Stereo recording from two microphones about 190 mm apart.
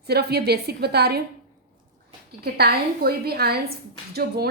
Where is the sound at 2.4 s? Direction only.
55° right (ahead or behind).